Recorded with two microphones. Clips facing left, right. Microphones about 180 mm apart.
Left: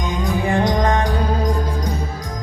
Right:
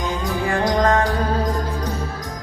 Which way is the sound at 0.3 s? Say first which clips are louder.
Left 3 dB; 20° left (ahead or behind).